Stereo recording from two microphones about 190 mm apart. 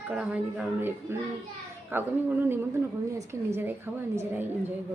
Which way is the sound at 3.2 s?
15° right (ahead or behind).